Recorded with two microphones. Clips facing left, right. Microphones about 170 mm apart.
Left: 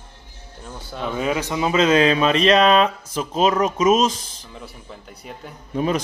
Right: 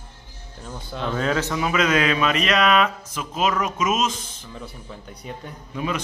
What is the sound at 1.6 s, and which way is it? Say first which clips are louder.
Speech: left 6 dB; 30° left (ahead or behind).